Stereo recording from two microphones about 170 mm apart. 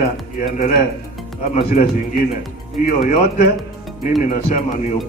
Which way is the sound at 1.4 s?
50° left (ahead or behind).